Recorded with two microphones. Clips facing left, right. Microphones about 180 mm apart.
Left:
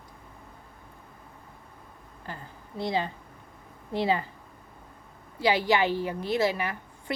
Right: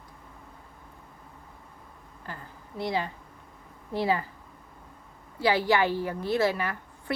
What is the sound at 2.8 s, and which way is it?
A woman's voice, 25° left (ahead or behind).